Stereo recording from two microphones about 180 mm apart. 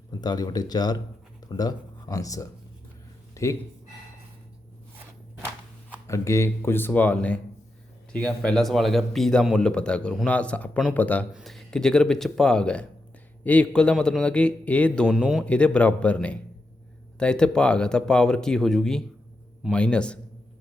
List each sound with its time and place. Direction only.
0.1 s speech: 20° left (ahead or behind)
6.1 s a man's voice: 15° left (ahead or behind)